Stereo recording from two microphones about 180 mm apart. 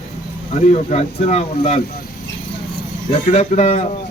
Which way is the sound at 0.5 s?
40° left (ahead or behind).